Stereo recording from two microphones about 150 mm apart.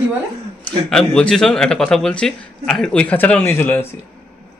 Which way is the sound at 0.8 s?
5° left (ahead or behind).